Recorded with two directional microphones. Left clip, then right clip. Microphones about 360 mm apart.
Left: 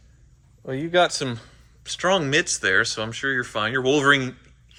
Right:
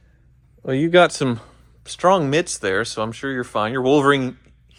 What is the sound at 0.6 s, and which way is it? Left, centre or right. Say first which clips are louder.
A man's voice: right 6 dB; right.